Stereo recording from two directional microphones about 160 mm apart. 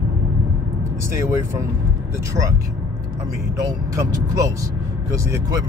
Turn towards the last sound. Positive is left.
turn(degrees=-20)  # may be behind; listen again after turning